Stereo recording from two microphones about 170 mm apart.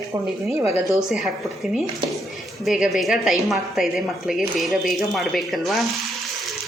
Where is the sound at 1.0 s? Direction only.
Centre (ahead or behind).